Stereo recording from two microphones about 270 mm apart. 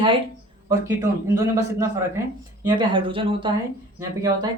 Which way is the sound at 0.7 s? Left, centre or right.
Centre.